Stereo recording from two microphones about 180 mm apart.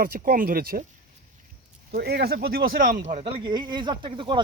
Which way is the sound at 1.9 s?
60° right (ahead or behind).